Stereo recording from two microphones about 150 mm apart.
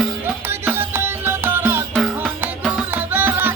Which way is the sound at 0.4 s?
15° right (ahead or behind).